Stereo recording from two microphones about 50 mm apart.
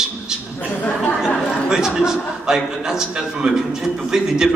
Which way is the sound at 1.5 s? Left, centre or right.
Centre.